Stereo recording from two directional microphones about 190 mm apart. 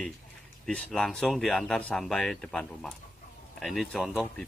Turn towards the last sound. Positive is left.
turn(degrees=0)  # may be behind; listen again after turning